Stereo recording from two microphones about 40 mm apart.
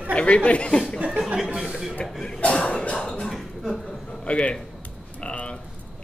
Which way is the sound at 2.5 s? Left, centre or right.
Left.